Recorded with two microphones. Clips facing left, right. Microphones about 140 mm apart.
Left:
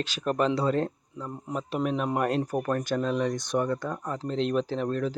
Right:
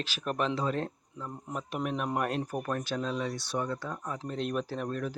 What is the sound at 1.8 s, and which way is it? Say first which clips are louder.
Speech: left 4 dB; 5° right (ahead or behind).